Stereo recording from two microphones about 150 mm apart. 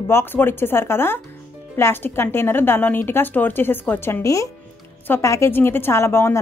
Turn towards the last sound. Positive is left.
turn(degrees=15)  # may be behind; listen again after turning